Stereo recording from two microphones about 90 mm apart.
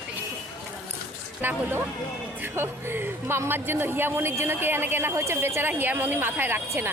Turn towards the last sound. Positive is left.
turn(degrees=-25)  # may be behind; listen again after turning